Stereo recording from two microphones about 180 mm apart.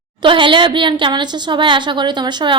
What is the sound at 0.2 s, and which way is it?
A woman's voice, 25° right (ahead or behind).